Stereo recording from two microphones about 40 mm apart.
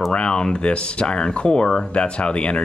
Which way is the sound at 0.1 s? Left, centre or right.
Left.